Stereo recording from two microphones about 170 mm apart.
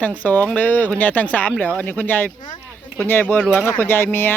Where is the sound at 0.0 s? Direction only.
10° left (ahead or behind).